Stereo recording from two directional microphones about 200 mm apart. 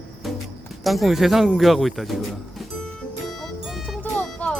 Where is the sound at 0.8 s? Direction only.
Centre (ahead or behind).